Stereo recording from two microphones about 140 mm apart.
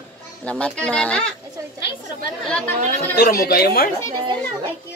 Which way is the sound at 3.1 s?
90° left.